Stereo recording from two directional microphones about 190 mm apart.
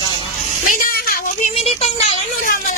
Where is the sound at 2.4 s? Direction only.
45° left (ahead or behind).